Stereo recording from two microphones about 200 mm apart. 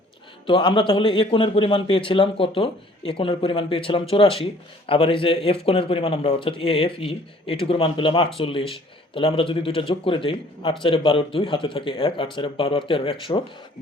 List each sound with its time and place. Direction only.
0.4 s speech: 25° left (ahead or behind)